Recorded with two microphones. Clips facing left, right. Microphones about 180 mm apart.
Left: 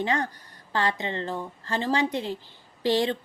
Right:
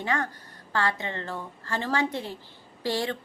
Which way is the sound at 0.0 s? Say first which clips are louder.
Left 2 dB; 20° left (ahead or behind).